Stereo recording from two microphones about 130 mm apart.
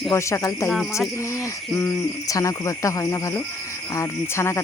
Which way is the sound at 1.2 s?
20° left (ahead or behind).